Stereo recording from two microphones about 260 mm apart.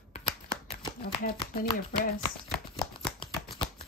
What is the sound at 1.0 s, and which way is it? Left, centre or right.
Speech, left.